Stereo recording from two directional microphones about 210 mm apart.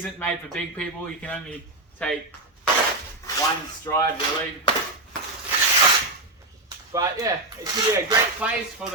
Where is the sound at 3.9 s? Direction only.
15° left (ahead or behind).